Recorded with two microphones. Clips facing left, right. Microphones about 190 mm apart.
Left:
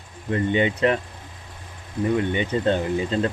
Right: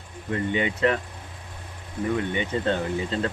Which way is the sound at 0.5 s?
25° left (ahead or behind).